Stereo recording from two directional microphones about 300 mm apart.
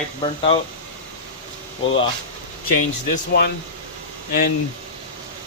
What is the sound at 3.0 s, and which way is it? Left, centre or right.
Speech, left.